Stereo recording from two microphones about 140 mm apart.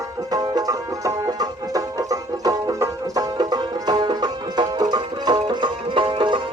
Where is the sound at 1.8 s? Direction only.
25° right (ahead or behind).